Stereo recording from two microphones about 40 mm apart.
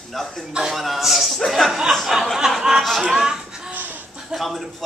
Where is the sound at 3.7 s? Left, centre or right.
Right.